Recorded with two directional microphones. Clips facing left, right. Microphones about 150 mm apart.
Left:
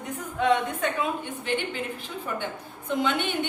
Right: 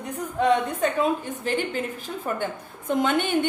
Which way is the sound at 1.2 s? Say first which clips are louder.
Right 3 dB; 40° right (ahead or behind).